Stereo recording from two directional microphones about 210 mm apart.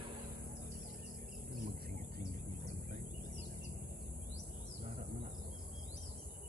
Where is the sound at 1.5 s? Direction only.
45° right (ahead or behind).